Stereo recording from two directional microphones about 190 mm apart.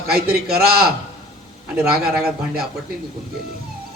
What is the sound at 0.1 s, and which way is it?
Speech, 55° right (ahead or behind).